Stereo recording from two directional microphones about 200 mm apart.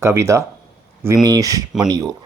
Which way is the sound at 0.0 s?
15° right (ahead or behind).